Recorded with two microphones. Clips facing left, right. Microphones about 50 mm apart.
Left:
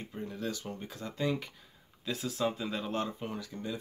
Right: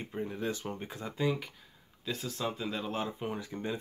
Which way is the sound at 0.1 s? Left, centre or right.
Right.